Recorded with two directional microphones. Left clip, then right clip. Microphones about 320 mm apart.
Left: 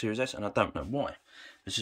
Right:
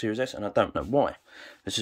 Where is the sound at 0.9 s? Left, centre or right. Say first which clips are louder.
Right 9 dB; centre.